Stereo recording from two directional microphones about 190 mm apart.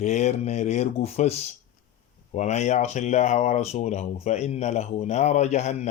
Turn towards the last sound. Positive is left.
turn(degrees=35)  # may be behind; listen again after turning